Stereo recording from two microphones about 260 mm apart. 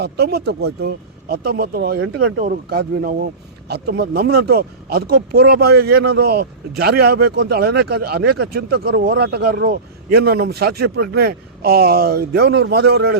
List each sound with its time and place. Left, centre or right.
0.0 s speech: right